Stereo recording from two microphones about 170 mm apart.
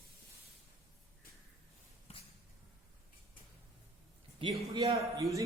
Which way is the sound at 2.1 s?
35° left (ahead or behind).